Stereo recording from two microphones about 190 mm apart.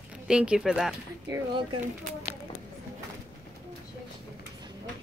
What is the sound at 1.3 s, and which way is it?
Speech, 25° right (ahead or behind).